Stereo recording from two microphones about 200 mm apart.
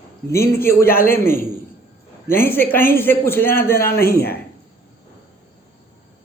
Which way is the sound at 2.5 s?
10° left (ahead or behind).